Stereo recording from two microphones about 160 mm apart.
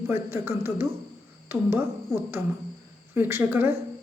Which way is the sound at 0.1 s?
15° right (ahead or behind).